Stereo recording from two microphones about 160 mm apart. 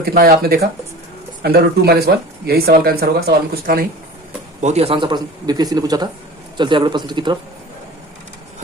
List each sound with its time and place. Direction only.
0.0 s speech: 70° right (ahead or behind)
4.6 s speech: 40° right (ahead or behind)